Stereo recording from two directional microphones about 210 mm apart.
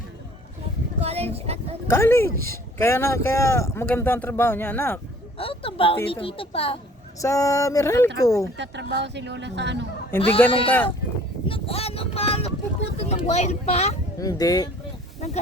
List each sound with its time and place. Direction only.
0.9 s a sound: 30° right (ahead or behind)
1.9 s speech: 10° left (ahead or behind)
5.4 s a woman's voice: 25° left (ahead or behind)
7.2 s speech: 15° left (ahead or behind)
8.5 s speech: 55° right (ahead or behind)
10.2 s a woman's voice: 25° left (ahead or behind)
11.4 s speech: 25° left (ahead or behind)
14.2 s speech: 15° left (ahead or behind)